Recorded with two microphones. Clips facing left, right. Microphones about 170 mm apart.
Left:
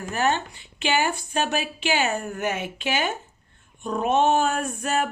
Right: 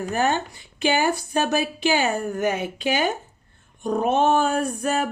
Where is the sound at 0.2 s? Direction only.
40° right (ahead or behind).